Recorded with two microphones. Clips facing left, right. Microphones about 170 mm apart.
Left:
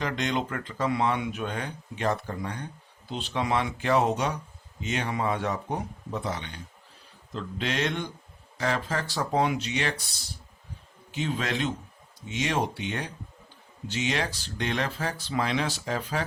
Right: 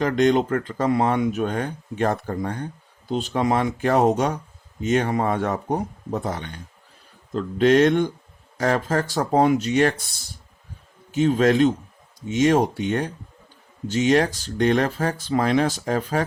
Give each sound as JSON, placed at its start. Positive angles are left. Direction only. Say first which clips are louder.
{"t": 0.0, "sound": "speech", "louder": "right 10 dB", "side_deg": -45}